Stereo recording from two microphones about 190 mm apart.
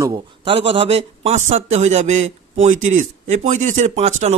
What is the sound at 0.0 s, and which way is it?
A man's voice, 25° right (ahead or behind).